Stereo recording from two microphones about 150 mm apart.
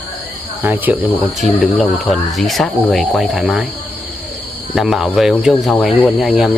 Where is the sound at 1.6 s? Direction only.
Centre (ahead or behind).